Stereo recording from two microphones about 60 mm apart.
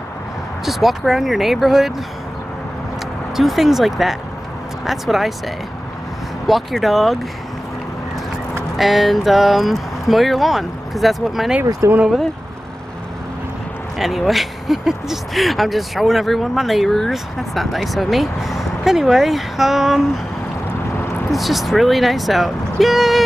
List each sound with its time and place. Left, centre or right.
0.7 s speech: centre
3.3 s speech: centre
6.4 s speech: centre
8.7 s speech: centre
11.8 s speech: right
13.9 s speech: centre
21.3 s speech: centre